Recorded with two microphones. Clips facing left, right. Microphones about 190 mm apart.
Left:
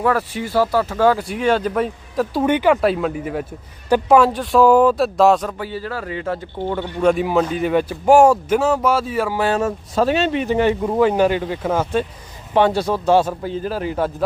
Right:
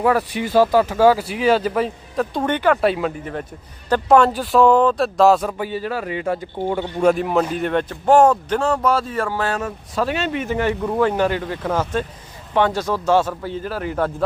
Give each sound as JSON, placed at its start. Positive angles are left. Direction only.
{"t": 0.0, "sound": "speech", "side_deg": -15}
{"t": 2.8, "sound": "speech", "side_deg": 0}
{"t": 7.1, "sound": "speech", "side_deg": 0}
{"t": 9.9, "sound": "speech", "side_deg": 30}
{"t": 12.5, "sound": "speech", "side_deg": 30}
{"t": 12.9, "sound": "a man's voice", "side_deg": 15}